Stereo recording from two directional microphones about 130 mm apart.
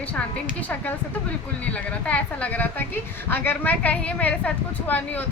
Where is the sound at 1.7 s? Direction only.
10° left (ahead or behind).